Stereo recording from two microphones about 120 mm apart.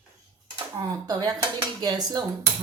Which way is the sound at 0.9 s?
30° right (ahead or behind).